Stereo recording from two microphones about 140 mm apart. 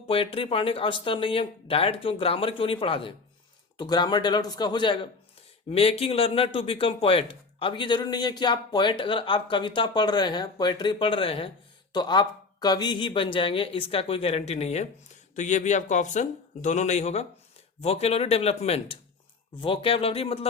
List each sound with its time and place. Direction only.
0.1 s speech: 40° left (ahead or behind)
5.7 s speech: 45° left (ahead or behind)